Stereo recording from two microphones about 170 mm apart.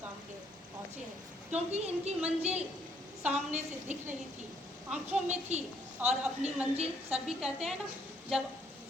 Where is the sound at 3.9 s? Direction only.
45° right (ahead or behind).